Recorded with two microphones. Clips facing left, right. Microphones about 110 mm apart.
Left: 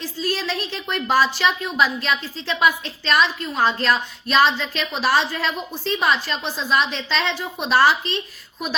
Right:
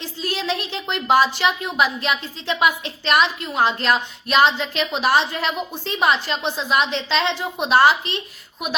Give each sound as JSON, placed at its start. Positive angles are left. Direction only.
{"t": 0.0, "sound": "a woman's voice", "side_deg": -20}